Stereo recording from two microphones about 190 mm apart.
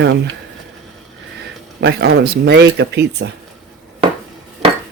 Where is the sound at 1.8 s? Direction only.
60° right (ahead or behind).